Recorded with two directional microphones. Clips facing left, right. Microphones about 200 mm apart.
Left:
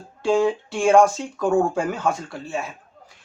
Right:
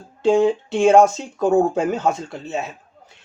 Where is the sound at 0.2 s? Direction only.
20° right (ahead or behind).